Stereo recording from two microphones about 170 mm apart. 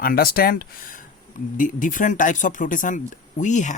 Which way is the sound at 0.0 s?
60° left (ahead or behind).